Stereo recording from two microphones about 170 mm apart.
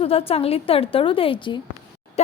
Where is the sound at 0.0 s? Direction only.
35° left (ahead or behind).